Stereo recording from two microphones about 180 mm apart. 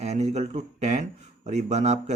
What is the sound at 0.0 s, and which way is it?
A man's voice, 40° right (ahead or behind).